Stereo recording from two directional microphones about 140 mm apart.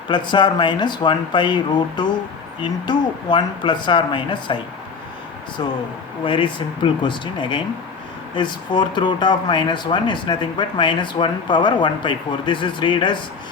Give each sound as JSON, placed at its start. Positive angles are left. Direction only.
{"t": 0.1, "sound": "speech", "side_deg": 35}
{"t": 6.2, "sound": "speech", "side_deg": 35}